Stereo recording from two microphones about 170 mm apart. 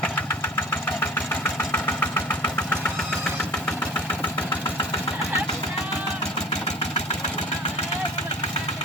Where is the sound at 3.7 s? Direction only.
10° left (ahead or behind).